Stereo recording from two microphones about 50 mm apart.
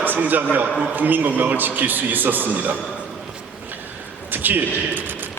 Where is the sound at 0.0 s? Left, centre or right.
Right.